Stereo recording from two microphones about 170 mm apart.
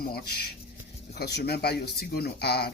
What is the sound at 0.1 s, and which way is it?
Speech, 70° left (ahead or behind).